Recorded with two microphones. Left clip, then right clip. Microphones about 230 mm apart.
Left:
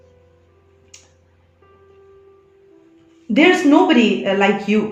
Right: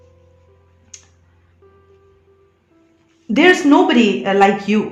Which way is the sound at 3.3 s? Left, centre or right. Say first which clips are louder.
Right 1 dB; right.